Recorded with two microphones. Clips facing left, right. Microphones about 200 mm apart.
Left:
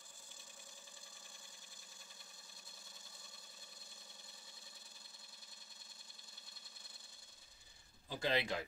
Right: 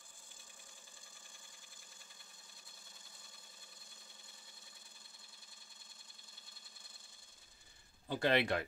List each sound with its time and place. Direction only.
8.1 s speech: 65° right (ahead or behind)